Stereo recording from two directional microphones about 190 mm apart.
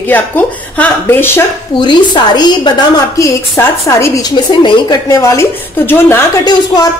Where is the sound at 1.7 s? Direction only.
25° left (ahead or behind).